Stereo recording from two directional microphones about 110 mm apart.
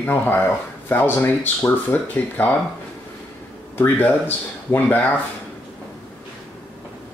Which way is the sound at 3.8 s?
20° left (ahead or behind).